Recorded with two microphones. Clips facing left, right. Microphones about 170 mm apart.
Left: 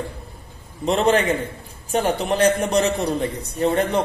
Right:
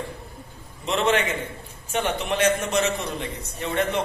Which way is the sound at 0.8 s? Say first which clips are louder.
Left 5 dB; 35° left (ahead or behind).